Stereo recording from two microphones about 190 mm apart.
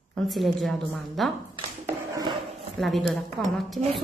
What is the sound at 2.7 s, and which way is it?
A woman's voice, centre (ahead or behind).